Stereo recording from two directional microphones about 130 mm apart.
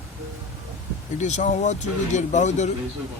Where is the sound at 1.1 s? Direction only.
65° left (ahead or behind).